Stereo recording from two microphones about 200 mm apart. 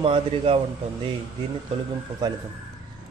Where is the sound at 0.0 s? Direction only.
25° right (ahead or behind).